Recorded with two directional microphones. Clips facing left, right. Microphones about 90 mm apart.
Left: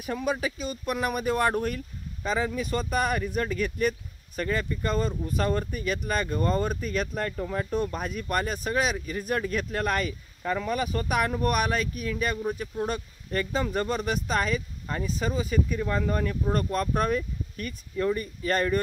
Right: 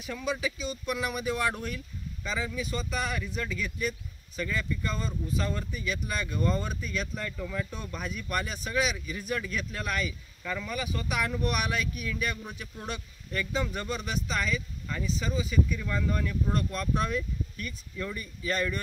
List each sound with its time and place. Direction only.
0.0 s speech: 45° left (ahead or behind)